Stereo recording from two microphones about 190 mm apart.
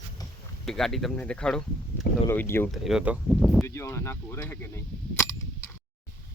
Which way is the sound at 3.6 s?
15° left (ahead or behind).